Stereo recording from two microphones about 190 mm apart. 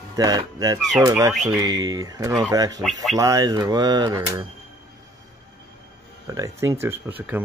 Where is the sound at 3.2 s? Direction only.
20° right (ahead or behind).